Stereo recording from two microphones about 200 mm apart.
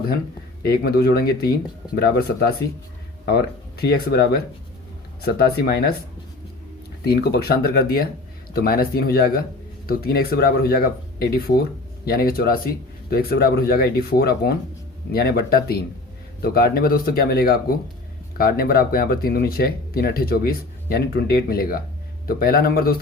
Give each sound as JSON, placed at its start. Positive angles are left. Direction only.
{"t": 0.6, "sound": "speech", "side_deg": 50}
{"t": 7.0, "sound": "speech", "side_deg": 50}